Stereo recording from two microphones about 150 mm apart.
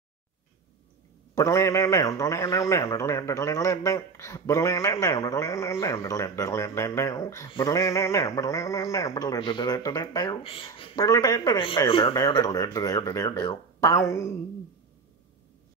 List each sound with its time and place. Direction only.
1.3 s a man's voice: 20° left (ahead or behind)
7.4 s speech: 35° left (ahead or behind)
7.7 s a man's voice: 20° left (ahead or behind); by 11.1 s 35° left (ahead or behind)
11.1 s a man's voice: 25° left (ahead or behind)